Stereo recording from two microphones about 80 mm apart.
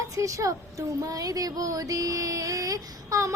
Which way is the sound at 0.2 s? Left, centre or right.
Right.